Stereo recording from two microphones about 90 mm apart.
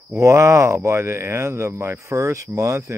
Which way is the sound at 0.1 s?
30° right (ahead or behind).